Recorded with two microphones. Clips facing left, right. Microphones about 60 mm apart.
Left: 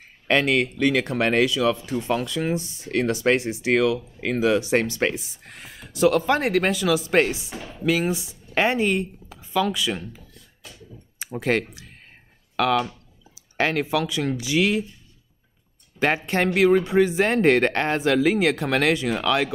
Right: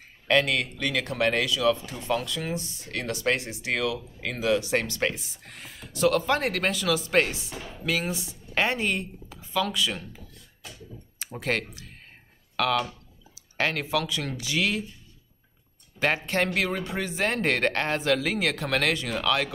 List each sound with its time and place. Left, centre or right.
0.3 s speech: left; by 10.0 s centre
11.1 s speech: centre
16.0 s speech: centre